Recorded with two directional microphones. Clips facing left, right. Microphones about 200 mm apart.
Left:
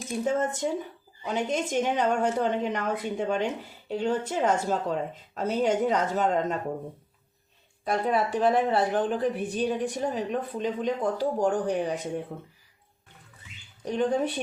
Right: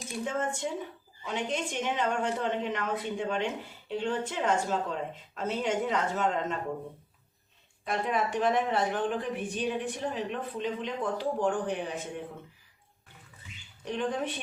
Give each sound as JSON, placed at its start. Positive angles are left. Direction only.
{"t": 0.3, "sound": "a woman's voice", "side_deg": 40}
{"t": 7.9, "sound": "a woman's voice", "side_deg": 35}
{"t": 13.8, "sound": "a woman's voice", "side_deg": 40}